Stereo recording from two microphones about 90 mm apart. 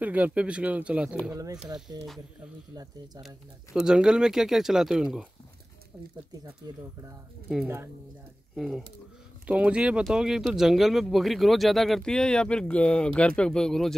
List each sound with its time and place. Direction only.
0.0 s speech: 15° right (ahead or behind)
1.3 s speech: 40° right (ahead or behind)
3.2 s speech: 5° right (ahead or behind)
6.4 s speech: 35° right (ahead or behind)
8.5 s speech: 5° right (ahead or behind)
9.5 s speech: 15° right (ahead or behind); by 13.9 s 5° left (ahead or behind)